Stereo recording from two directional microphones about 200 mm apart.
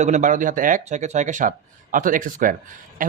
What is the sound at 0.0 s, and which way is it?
Speech, 35° right (ahead or behind).